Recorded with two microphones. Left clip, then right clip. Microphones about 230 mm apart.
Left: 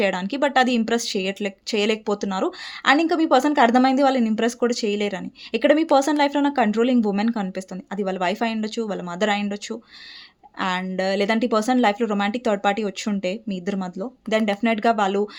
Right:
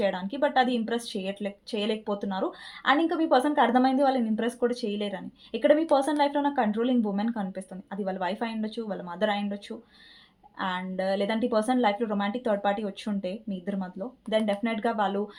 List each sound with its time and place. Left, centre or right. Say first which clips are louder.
0.0 s speech: left 5 dB; left